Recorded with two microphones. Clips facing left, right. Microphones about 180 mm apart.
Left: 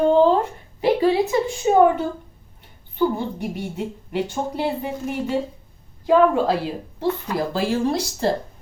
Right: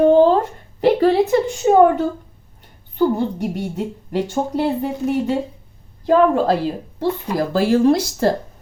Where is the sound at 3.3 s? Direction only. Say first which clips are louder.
Right 4 dB; 40° right (ahead or behind).